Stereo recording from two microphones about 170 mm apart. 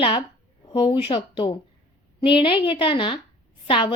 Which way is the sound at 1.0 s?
30° left (ahead or behind).